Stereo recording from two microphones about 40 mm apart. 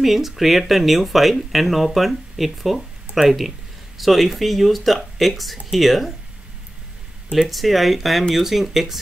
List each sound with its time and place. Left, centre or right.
0.0 s speech: centre
7.4 s speech: centre